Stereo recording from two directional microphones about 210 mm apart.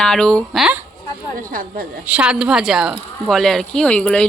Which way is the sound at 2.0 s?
5° right (ahead or behind).